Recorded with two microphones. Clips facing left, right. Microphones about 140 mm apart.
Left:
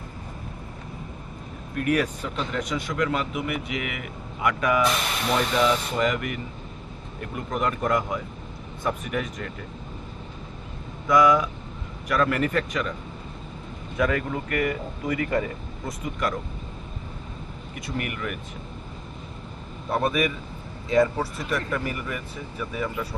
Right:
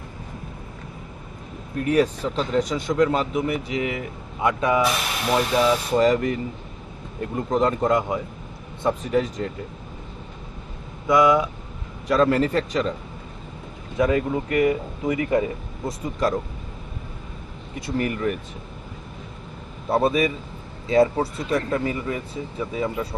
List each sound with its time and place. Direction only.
1.8 s speech: 25° right (ahead or behind)
4.8 s speech: 5° right (ahead or behind)
6.0 s speech: 30° right (ahead or behind)
11.0 s speech: 25° right (ahead or behind)
13.9 s speech: 25° right (ahead or behind)
17.7 s speech: 30° right (ahead or behind)
19.9 s speech: 30° right (ahead or behind)